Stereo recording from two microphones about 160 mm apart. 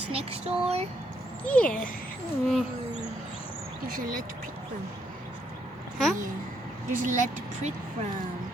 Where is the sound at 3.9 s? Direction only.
60° right (ahead or behind).